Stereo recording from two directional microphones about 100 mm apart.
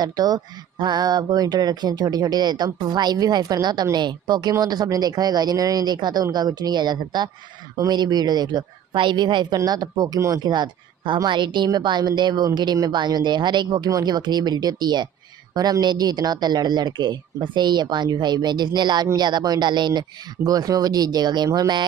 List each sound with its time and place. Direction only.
0.0 s speech: 40° right (ahead or behind)